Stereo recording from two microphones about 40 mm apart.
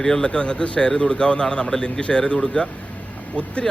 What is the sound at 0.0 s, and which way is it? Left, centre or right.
Speech, centre.